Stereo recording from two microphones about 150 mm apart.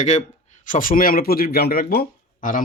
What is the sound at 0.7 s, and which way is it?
Speech, 65° left (ahead or behind).